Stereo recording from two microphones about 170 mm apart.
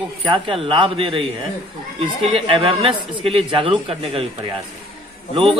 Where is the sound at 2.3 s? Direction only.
30° right (ahead or behind).